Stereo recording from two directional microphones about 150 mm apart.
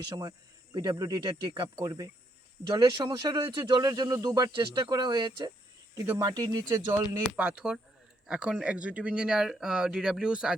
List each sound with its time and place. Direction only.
0.2 s speech: 25° right (ahead or behind)
7.3 s speech: 5° right (ahead or behind)